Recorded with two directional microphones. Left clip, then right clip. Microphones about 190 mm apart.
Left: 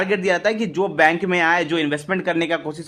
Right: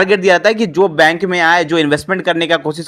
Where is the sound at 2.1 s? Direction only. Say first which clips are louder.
Right 7 dB; 20° right (ahead or behind).